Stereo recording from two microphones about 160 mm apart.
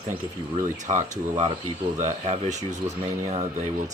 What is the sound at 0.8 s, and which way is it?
Speech, 50° right (ahead or behind).